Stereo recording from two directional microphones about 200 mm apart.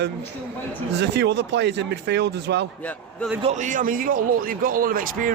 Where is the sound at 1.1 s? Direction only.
60° right (ahead or behind).